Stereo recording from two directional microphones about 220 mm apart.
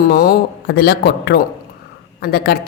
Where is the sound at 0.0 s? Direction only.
40° left (ahead or behind).